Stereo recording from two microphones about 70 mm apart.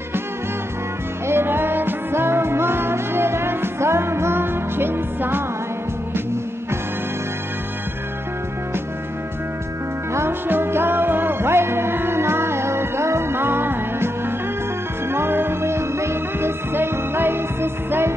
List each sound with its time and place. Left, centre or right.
1.2 s music: right
10.1 s music: right